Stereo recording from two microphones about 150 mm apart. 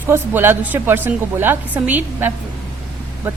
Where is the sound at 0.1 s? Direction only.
15° right (ahead or behind).